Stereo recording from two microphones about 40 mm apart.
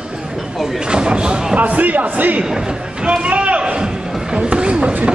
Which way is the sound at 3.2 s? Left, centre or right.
Right.